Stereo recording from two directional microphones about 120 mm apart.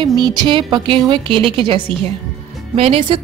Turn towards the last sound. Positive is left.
turn(degrees=-55)  # may be behind; listen again after turning